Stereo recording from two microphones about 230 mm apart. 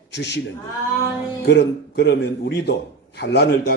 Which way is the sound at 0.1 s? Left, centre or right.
Left.